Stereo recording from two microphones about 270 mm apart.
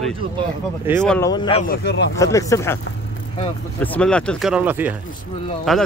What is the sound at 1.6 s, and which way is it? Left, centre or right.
Speech, left.